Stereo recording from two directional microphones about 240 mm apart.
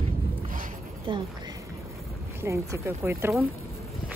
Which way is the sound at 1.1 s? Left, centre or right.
Right.